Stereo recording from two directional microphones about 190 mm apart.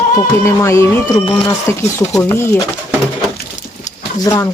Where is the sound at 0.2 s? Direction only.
15° left (ahead or behind).